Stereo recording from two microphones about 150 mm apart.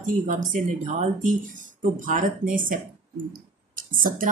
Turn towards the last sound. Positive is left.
turn(degrees=-65)  # may be behind; listen again after turning